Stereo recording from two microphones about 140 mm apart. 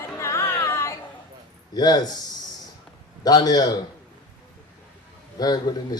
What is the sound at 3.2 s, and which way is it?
Speech, 30° left (ahead or behind).